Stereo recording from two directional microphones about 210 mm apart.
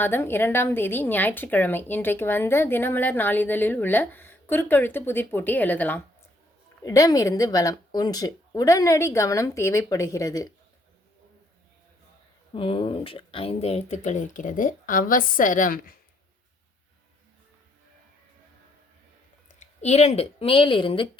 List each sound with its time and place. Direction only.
0.0 s speech: 10° left (ahead or behind)
12.5 s speech: 25° left (ahead or behind); by 16.0 s 40° left (ahead or behind)
19.5 s speech: 35° left (ahead or behind)